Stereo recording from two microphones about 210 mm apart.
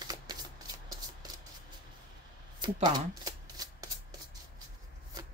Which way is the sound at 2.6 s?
20° right (ahead or behind).